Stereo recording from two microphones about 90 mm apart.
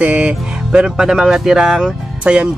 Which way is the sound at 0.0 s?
10° right (ahead or behind).